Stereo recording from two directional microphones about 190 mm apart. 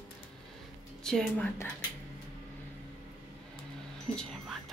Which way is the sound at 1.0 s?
Centre (ahead or behind).